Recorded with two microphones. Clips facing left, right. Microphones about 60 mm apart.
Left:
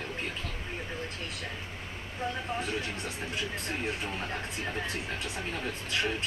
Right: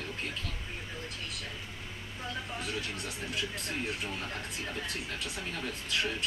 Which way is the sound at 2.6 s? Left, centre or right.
Left.